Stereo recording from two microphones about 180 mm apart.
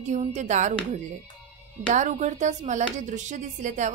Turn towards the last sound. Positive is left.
turn(degrees=-40)  # may be behind; listen again after turning